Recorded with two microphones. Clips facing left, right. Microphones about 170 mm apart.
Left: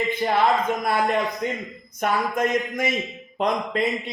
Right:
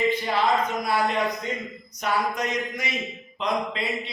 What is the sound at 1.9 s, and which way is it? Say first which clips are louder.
A man's voice: left 2 dB; 50° left (ahead or behind).